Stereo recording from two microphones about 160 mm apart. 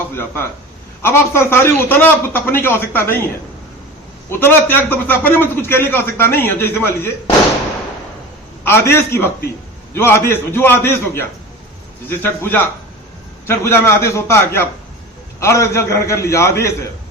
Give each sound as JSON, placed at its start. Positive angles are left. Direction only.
{"t": 0.1, "sound": "a man's voice", "side_deg": 15}
{"t": 4.3, "sound": "a man's voice", "side_deg": 15}
{"t": 8.6, "sound": "a man's voice", "side_deg": 15}